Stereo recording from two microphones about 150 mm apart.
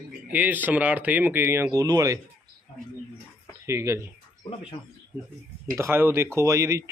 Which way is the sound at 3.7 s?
20° right (ahead or behind).